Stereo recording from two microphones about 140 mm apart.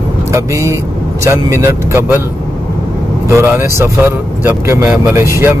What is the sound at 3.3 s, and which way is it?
Speech, 20° right (ahead or behind).